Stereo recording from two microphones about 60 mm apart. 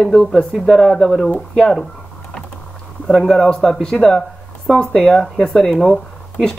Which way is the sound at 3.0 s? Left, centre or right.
Centre.